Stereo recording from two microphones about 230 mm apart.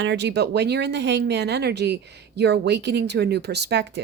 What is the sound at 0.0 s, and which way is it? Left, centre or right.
Speech, right.